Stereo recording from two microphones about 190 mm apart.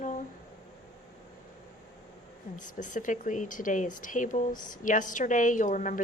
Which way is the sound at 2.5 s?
40° left (ahead or behind).